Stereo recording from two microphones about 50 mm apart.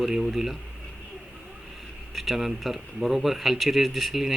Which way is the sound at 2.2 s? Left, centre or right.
Centre.